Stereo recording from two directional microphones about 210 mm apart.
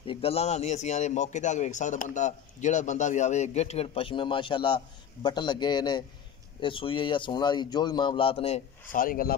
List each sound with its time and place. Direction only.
0.0 s a man's voice: 25° left (ahead or behind)
8.9 s speech: 40° left (ahead or behind)